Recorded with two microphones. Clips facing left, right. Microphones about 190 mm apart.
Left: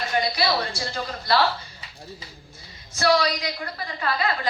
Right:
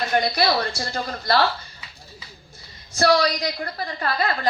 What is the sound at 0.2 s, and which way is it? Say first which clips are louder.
Speech: right 1 dB; 50° right (ahead or behind).